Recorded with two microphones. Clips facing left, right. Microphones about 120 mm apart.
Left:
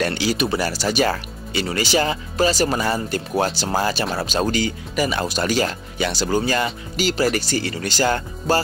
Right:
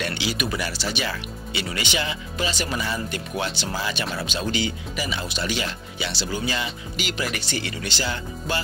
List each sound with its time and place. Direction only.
0.0 s speech: 40° left (ahead or behind)